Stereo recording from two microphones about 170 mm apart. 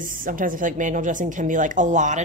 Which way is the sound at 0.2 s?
55° right (ahead or behind).